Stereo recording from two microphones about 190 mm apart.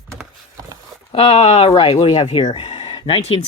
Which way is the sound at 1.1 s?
30° left (ahead or behind).